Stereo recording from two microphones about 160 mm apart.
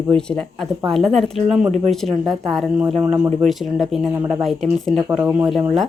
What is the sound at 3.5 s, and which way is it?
Speech, centre (ahead or behind).